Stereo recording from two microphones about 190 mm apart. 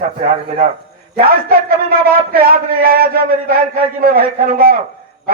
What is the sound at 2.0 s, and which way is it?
A man's voice, 50° right (ahead or behind).